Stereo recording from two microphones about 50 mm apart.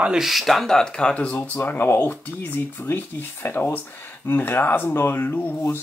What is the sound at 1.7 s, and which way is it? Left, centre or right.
Speech, left.